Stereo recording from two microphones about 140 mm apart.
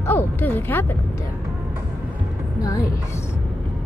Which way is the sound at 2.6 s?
25° left (ahead or behind).